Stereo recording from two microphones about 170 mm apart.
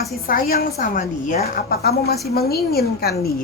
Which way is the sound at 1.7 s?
70° left (ahead or behind).